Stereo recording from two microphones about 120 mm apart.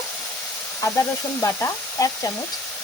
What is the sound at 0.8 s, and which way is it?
Frying, 25° left (ahead or behind).